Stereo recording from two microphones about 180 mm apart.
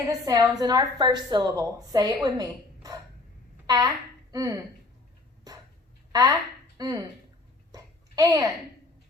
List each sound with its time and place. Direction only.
0.1 s a woman's voice: 20° right (ahead or behind)
6.1 s speech: 20° right (ahead or behind)
7.7 s a sound: 20° right (ahead or behind)